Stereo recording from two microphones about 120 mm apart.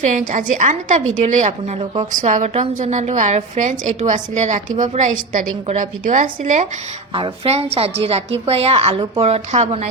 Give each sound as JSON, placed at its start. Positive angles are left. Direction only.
{"t": 0.0, "sound": "a woman's voice", "side_deg": -90}
{"t": 1.8, "sound": "a woman's voice", "side_deg": -70}
{"t": 7.1, "sound": "a woman's voice", "side_deg": -50}